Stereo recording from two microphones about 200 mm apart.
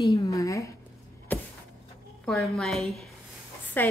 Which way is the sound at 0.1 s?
15° left (ahead or behind).